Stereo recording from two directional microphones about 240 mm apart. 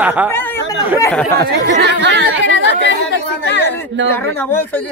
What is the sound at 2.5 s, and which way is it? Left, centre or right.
Chatter, left.